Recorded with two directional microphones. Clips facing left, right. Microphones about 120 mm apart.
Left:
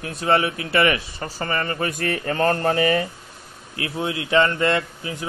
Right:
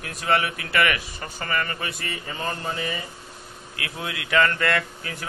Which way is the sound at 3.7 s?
30° left (ahead or behind).